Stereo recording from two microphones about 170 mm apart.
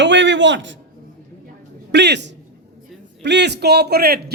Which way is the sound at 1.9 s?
90° right.